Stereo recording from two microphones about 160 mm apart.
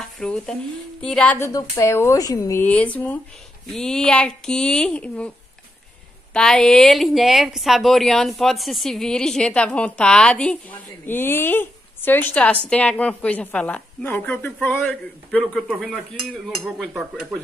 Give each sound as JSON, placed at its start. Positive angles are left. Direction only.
{"t": 0.0, "sound": "speech", "side_deg": 5}
{"t": 1.5, "sound": "a woman's voice", "side_deg": 20}
{"t": 6.3, "sound": "a woman's voice", "side_deg": 5}